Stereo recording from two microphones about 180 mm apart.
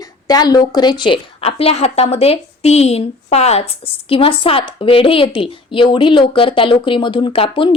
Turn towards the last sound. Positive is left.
turn(degrees=30)  # may be behind; listen again after turning